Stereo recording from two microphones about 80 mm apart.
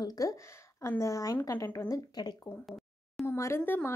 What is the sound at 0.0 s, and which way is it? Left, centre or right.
A woman's voice, left.